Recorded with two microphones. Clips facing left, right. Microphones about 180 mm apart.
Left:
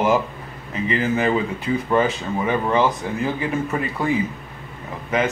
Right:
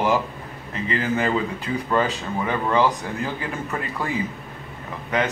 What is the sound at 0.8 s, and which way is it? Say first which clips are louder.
A man's voice: left 3 dB; 10° left (ahead or behind).